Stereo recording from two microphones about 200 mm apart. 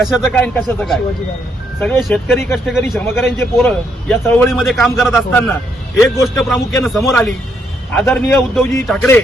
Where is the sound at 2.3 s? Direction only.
10° left (ahead or behind).